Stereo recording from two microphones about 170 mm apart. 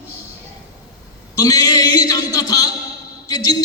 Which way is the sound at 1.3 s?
20° left (ahead or behind).